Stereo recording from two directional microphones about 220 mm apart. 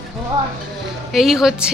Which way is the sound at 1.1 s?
Centre (ahead or behind).